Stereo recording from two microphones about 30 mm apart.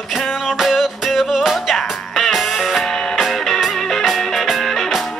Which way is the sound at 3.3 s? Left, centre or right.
Centre.